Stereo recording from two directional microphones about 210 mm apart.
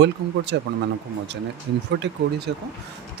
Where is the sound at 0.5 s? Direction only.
55° right (ahead or behind).